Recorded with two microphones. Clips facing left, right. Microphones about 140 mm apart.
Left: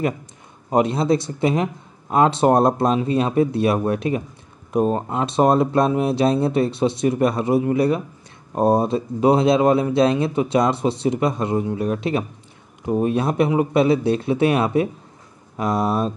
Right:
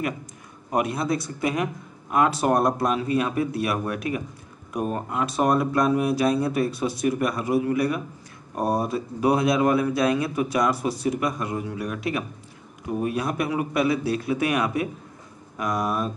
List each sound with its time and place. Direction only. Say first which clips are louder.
0.7 s speech: left 6 dB; 25° left (ahead or behind)